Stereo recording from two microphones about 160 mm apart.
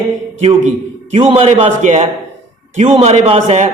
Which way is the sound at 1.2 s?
35° right (ahead or behind).